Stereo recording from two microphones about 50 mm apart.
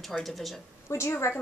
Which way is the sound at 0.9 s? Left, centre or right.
Left.